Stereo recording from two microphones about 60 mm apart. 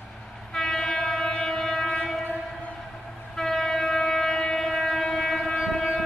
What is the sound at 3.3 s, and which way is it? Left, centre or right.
Train, centre.